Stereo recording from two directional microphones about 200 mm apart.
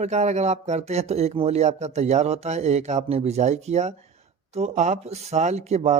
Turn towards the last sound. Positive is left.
turn(degrees=-35)  # may be behind; listen again after turning